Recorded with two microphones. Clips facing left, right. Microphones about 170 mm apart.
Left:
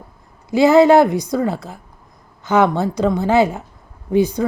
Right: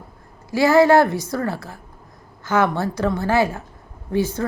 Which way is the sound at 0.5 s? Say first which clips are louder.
Left 3 dB; 20° left (ahead or behind).